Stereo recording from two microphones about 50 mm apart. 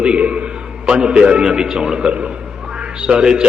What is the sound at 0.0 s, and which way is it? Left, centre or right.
A man's voice, right.